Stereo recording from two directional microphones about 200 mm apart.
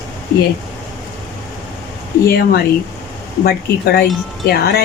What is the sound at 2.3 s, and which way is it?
Speech, 50° left (ahead or behind).